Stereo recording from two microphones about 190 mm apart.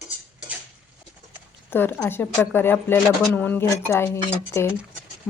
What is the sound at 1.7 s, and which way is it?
A woman's voice, 10° left (ahead or behind).